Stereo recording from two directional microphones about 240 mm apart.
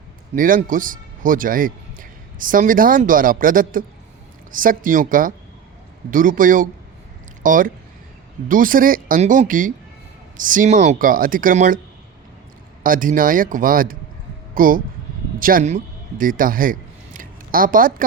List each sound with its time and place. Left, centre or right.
0.3 s a man's voice: right
12.8 s a man's voice: right
17.2 s a sound: right